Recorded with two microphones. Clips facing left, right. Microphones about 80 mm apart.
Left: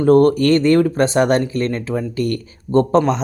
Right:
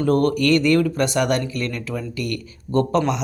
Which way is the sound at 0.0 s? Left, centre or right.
Left.